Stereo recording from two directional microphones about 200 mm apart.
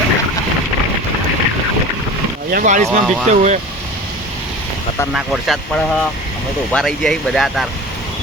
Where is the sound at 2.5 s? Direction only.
35° right (ahead or behind).